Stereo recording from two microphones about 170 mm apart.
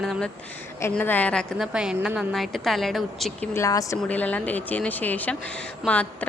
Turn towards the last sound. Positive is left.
turn(degrees=10)  # may be behind; listen again after turning